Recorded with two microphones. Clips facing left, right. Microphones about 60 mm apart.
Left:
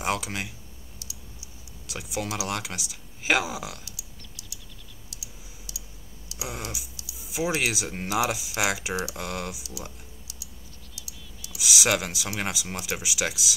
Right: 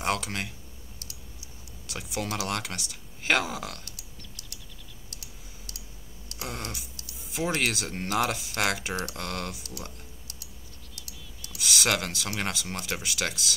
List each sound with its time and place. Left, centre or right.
0.0 s speech: centre
1.0 s clicking: right
1.9 s speech: centre
3.8 s typing: right
5.1 s clicking: right
6.3 s typing: centre
7.2 s speech: centre
11.0 s a sound: right
11.5 s speech: centre